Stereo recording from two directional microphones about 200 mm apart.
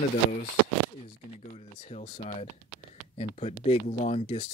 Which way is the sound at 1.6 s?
30° left (ahead or behind).